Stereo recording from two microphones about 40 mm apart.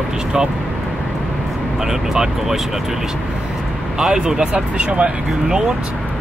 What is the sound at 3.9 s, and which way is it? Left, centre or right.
Speech, centre.